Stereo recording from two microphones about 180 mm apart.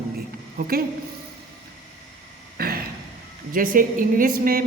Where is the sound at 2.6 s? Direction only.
55° right (ahead or behind).